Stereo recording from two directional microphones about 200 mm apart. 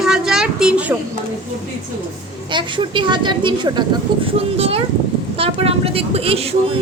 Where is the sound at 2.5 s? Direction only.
25° right (ahead or behind).